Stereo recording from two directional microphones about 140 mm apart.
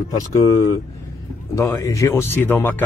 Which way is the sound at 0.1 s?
25° left (ahead or behind).